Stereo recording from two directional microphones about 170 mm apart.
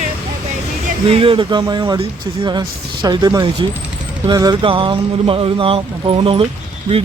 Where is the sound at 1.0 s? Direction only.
30° right (ahead or behind).